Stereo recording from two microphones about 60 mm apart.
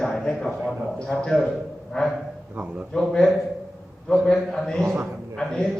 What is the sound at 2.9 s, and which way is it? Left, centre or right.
A man's voice, centre.